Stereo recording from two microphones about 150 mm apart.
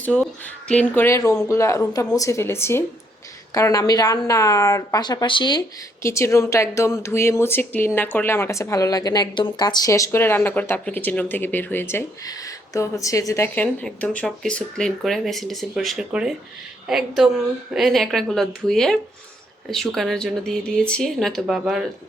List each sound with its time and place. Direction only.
0.0 s a woman's voice: 10° left (ahead or behind); by 5.6 s 30° left (ahead or behind)
6.0 s a woman's voice: 20° left (ahead or behind); by 21.8 s centre (ahead or behind)